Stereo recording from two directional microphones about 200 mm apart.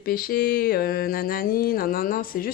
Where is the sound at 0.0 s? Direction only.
45° left (ahead or behind).